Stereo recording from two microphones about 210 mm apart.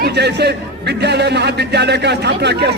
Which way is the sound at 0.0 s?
55° right (ahead or behind).